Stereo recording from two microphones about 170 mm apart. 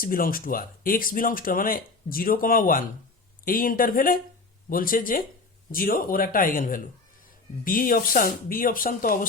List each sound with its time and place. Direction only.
0.0 s speech: 55° left (ahead or behind)